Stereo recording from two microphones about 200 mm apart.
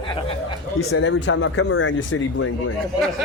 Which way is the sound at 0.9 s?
80° left.